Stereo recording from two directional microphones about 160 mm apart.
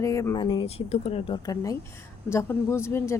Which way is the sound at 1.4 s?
20° left (ahead or behind).